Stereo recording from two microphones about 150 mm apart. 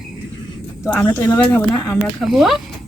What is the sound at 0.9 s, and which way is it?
Speech, 10° left (ahead or behind).